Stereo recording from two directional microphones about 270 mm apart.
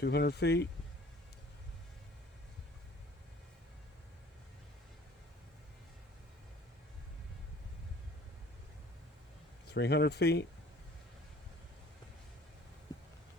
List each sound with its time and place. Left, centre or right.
0.0 s speech: left
9.6 s speech: left